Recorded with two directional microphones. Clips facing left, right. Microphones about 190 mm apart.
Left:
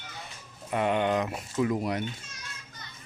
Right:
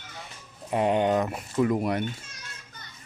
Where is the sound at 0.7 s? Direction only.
35° right (ahead or behind).